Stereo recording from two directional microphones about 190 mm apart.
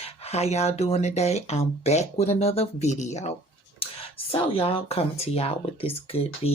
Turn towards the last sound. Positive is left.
turn(degrees=30)  # may be behind; listen again after turning